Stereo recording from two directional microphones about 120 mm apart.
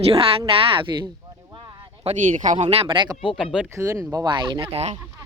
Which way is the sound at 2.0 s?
85° right.